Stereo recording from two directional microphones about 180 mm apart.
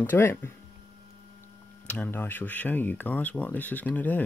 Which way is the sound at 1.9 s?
10° left (ahead or behind).